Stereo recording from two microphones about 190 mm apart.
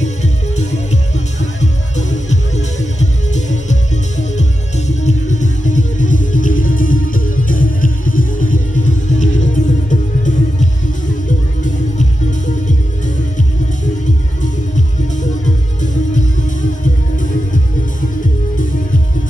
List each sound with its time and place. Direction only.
0.0 s music: 40° left (ahead or behind)
15.4 s music: 40° left (ahead or behind)